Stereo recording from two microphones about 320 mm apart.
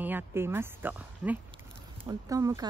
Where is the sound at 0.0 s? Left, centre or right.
Centre.